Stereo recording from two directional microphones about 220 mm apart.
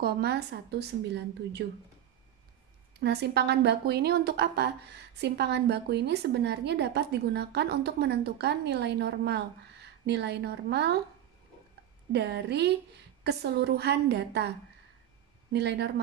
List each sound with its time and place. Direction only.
0.0 s a woman's voice: 50° right (ahead or behind)
3.0 s a woman's voice: 50° right (ahead or behind)
12.1 s a woman's voice: 50° right (ahead or behind)
15.5 s a woman's voice: 50° right (ahead or behind)